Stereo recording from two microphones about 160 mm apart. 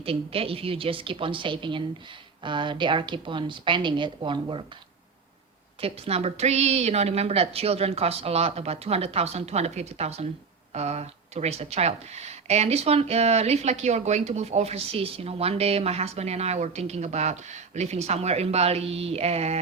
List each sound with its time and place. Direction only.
0.0 s speech: 35° right (ahead or behind)
5.8 s speech: 40° right (ahead or behind)